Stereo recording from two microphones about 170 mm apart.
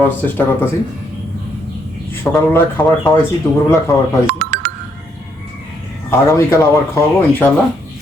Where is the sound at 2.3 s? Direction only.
15° left (ahead or behind).